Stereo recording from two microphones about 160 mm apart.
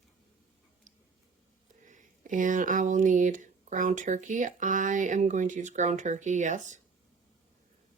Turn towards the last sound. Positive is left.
turn(degrees=-50)  # may be behind; listen again after turning